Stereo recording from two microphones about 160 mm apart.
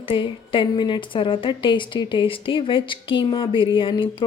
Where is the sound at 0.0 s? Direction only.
35° left (ahead or behind).